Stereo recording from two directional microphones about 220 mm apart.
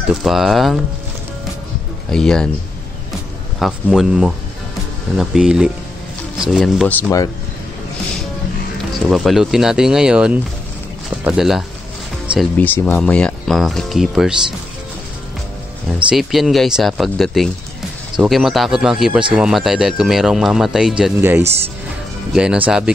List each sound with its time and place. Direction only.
0.1 s speech: centre (ahead or behind)
2.0 s speech: 5° left (ahead or behind)
3.5 s speech: centre (ahead or behind)
9.1 s speech: centre (ahead or behind)
15.9 s speech: centre (ahead or behind)